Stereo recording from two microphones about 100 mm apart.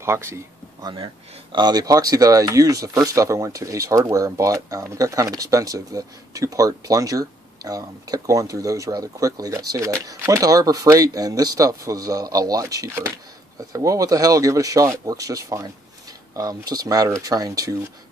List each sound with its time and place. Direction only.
0.0 s speech: 25° right (ahead or behind)
0.8 s speech: 50° right (ahead or behind)